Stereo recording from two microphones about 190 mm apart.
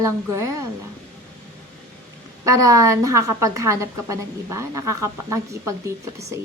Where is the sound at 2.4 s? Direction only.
15° right (ahead or behind).